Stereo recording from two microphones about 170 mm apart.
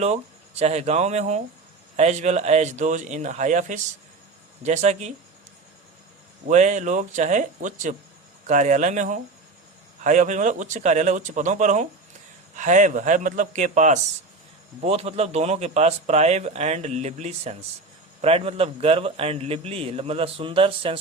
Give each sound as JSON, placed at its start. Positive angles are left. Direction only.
{"t": 0.6, "sound": "a man's voice", "side_deg": -40}
{"t": 6.5, "sound": "a man's voice", "side_deg": -45}